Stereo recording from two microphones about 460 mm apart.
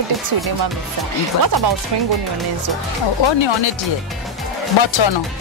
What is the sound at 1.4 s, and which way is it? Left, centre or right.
Speech, right.